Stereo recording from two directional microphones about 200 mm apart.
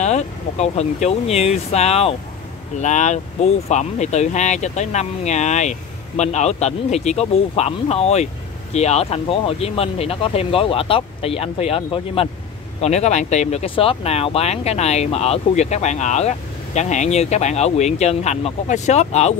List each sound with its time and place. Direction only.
0.0 s speech: 35° left (ahead or behind)